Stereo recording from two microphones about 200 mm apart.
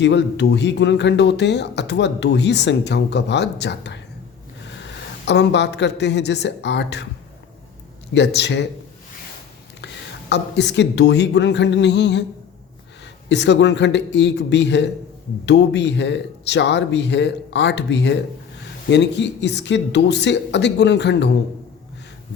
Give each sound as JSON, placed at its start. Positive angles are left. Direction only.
{"t": 0.0, "sound": "speech", "side_deg": 60}
{"t": 8.1, "sound": "speech", "side_deg": 60}
{"t": 9.8, "sound": "speech", "side_deg": 60}
{"t": 13.2, "sound": "speech", "side_deg": 60}